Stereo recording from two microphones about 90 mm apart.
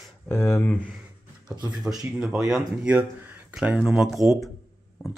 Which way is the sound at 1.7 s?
5° right (ahead or behind).